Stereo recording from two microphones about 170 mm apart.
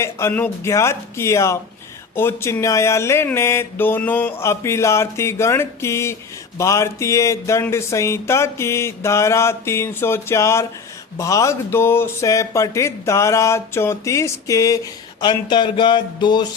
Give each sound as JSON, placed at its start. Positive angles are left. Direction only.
{"t": 0.0, "sound": "music", "side_deg": 15}
{"t": 15.2, "sound": "speech", "side_deg": 25}